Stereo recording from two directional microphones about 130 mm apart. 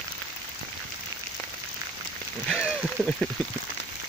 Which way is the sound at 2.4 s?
5° right (ahead or behind).